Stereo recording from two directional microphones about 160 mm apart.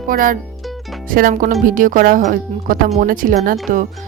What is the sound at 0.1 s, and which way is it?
A woman's voice, 60° right (ahead or behind).